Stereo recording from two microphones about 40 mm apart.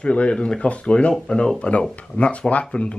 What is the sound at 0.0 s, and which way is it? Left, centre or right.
Speech, left.